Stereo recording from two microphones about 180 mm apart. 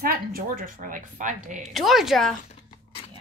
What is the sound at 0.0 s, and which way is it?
A woman's voice, 55° right (ahead or behind).